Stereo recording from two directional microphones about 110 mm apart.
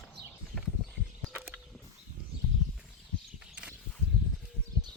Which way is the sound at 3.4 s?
10° right (ahead or behind).